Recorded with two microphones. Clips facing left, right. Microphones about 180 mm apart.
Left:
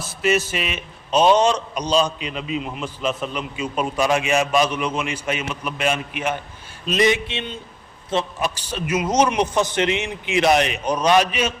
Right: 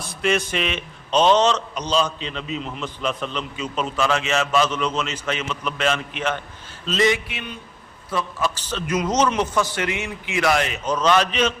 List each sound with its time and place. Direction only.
0.1 s a man's voice: 5° left (ahead or behind)